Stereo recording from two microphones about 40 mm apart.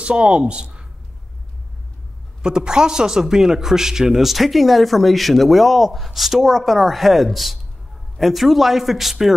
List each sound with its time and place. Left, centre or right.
0.0 s speech: right
2.4 s a man's voice: centre